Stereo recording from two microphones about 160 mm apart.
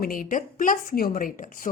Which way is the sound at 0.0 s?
60° left (ahead or behind).